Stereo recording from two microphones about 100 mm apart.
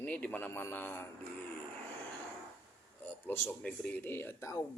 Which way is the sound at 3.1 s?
20° left (ahead or behind).